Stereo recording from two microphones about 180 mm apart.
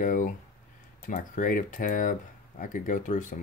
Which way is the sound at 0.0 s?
50° left (ahead or behind).